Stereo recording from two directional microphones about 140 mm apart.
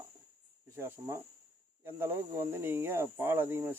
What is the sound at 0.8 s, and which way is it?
Speech, 15° right (ahead or behind).